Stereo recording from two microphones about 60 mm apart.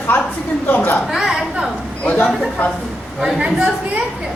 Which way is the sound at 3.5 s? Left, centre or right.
Centre.